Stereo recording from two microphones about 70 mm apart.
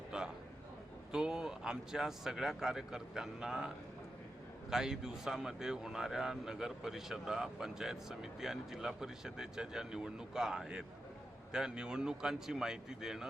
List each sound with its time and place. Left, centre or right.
0.1 s a man's voice: centre
4.7 s speech: centre